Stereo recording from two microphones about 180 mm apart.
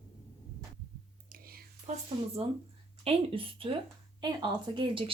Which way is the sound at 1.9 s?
40° right (ahead or behind).